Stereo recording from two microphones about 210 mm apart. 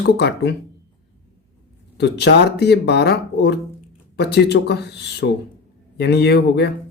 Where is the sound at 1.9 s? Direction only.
55° left (ahead or behind).